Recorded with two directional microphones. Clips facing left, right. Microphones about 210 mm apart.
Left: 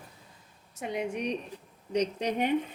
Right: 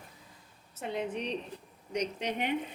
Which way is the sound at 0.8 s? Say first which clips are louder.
Left 2 dB; 15° left (ahead or behind).